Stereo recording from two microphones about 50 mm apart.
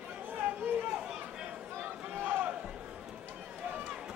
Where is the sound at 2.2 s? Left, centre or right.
Right.